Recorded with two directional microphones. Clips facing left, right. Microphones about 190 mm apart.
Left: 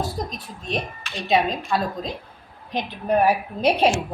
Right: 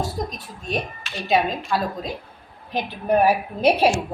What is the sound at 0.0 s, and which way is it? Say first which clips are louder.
A woman's voice: right 1 dB; centre (ahead or behind).